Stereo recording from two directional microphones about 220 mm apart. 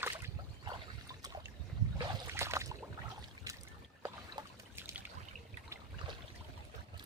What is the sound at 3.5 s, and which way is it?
Boat, 15° right (ahead or behind).